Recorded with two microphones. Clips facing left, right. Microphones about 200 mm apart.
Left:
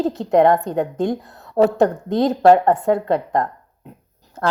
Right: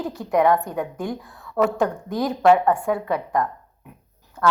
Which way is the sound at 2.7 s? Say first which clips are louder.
Left 4 dB; 20° left (ahead or behind).